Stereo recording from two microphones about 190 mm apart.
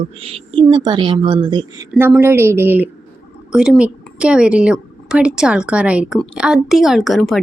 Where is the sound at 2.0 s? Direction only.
10° right (ahead or behind).